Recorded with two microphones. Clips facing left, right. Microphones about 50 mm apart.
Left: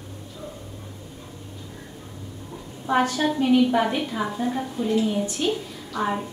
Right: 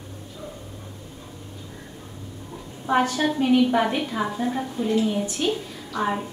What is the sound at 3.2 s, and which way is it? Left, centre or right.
A woman's voice, centre.